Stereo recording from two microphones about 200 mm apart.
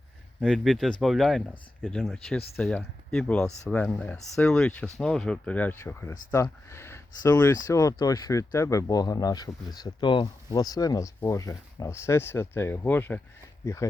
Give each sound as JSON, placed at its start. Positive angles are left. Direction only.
{"t": 0.4, "sound": "speech", "side_deg": 0}